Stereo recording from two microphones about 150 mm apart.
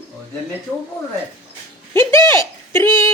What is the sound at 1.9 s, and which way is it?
Speech, 15° left (ahead or behind).